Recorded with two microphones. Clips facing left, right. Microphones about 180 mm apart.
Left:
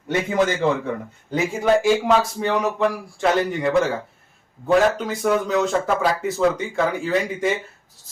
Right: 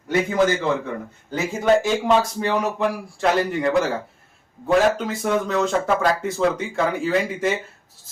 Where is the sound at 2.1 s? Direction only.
Centre (ahead or behind).